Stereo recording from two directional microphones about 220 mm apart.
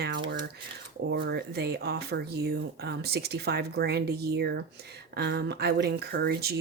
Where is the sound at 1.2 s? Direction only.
45° right (ahead or behind).